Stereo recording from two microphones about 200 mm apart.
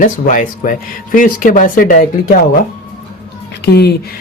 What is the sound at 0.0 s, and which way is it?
Speech, 40° left (ahead or behind).